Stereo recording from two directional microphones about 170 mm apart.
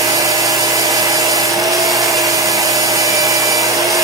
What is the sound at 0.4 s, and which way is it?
Tools, 20° right (ahead or behind).